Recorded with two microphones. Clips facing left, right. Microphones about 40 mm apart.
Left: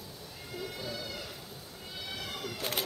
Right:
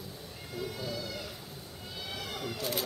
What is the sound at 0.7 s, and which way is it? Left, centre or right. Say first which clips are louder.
Speech: right 2 dB; centre.